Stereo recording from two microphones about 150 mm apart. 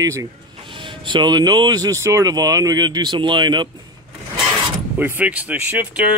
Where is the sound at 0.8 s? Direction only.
35° right (ahead or behind).